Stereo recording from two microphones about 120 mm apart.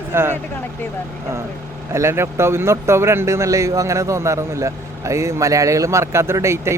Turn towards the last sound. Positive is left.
turn(degrees=-25)  # may be behind; listen again after turning